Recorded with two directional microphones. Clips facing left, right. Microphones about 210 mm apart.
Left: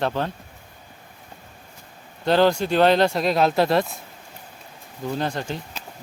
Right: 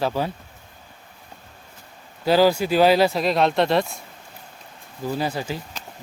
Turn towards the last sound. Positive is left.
turn(degrees=-5)  # may be behind; listen again after turning